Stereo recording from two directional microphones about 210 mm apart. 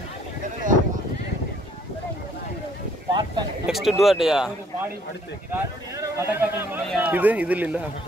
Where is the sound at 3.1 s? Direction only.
20° right (ahead or behind).